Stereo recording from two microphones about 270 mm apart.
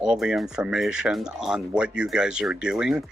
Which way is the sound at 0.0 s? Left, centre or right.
Centre.